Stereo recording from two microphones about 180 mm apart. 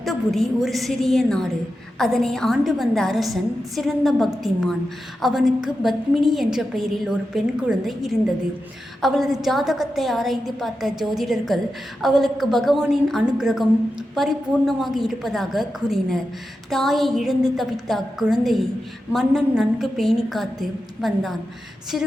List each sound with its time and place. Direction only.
0.0 s a woman's voice: centre (ahead or behind)